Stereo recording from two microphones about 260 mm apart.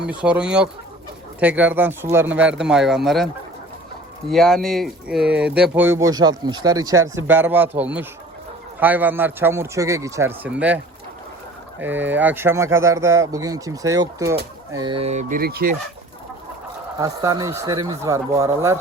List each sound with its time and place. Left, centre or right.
0.0 s speech: centre
4.3 s speech: centre
11.8 s speech: centre; by 15.7 s right
17.0 s speech: centre